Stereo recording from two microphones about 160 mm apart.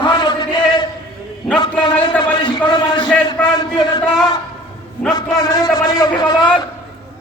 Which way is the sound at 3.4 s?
10° left (ahead or behind).